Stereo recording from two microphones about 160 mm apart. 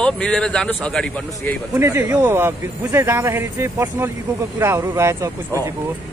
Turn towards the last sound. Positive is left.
turn(degrees=-15)  # may be behind; listen again after turning